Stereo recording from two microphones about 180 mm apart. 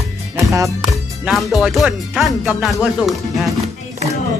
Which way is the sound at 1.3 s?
Centre (ahead or behind).